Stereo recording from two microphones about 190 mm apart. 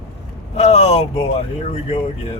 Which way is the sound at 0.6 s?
35° left (ahead or behind).